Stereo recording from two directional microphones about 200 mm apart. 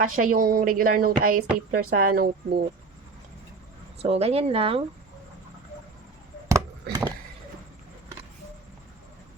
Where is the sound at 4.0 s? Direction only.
30° right (ahead or behind).